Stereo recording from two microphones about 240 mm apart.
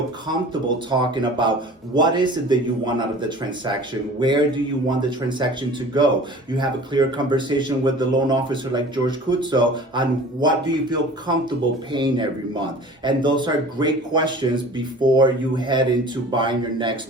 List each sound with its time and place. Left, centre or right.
0.5 s speech: centre
4.9 s speech: centre